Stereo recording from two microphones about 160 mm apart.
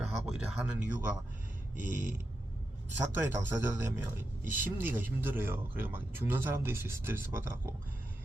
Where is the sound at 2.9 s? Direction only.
15° right (ahead or behind).